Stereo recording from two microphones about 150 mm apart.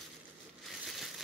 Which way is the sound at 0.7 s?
Centre (ahead or behind).